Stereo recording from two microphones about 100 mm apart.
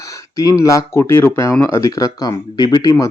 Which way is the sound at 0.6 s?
30° left (ahead or behind).